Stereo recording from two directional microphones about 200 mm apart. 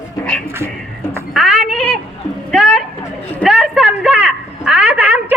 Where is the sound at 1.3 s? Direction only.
Centre (ahead or behind).